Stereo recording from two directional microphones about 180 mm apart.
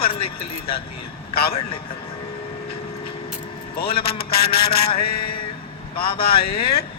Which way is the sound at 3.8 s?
60° left (ahead or behind).